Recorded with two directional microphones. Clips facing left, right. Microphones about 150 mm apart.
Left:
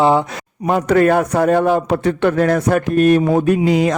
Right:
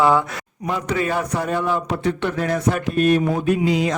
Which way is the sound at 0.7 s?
55° left (ahead or behind).